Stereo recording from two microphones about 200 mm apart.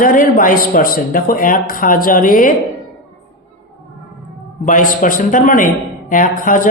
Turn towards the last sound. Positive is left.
turn(degrees=40)  # may be behind; listen again after turning